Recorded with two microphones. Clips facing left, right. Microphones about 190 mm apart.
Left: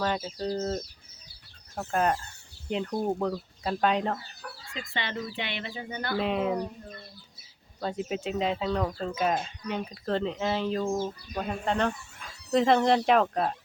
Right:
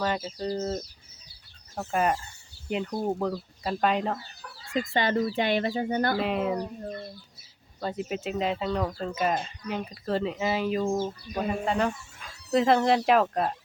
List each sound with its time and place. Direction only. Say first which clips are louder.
0.0 s speech: even; centre (ahead or behind)
4.7 s speech: right 10 dB; 45° right (ahead or behind)
6.1 s speech: even; centre (ahead or behind)
7.8 s speech: even; centre (ahead or behind)